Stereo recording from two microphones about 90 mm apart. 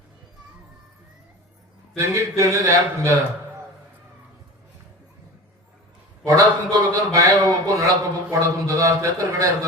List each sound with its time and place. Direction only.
2.0 s a man's voice: 35° right (ahead or behind)
6.2 s a man's voice: 40° right (ahead or behind)